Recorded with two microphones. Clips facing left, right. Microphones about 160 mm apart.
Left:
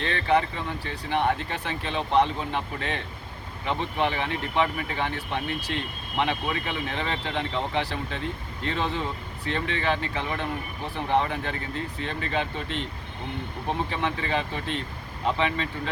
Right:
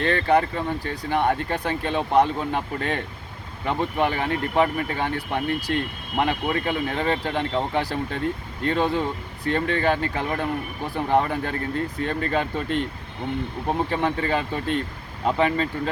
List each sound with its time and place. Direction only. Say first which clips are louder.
0.0 s speech: right 4 dB; 45° right (ahead or behind)
13.9 s speech: right 4 dB; 40° right (ahead or behind)